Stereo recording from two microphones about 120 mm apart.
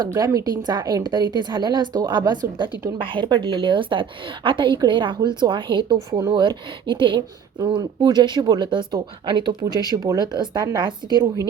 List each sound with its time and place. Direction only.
0.0 s a woman's voice: 30° right (ahead or behind)